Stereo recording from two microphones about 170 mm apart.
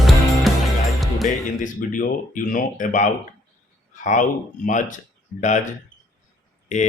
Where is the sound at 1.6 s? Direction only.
50° left (ahead or behind).